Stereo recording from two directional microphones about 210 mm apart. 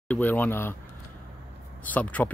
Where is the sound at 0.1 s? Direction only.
10° left (ahead or behind).